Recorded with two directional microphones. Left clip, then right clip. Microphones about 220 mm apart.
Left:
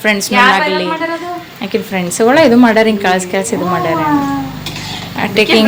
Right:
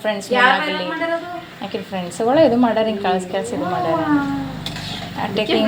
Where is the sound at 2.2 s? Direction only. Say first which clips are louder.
Left 6 dB; 35° left (ahead or behind).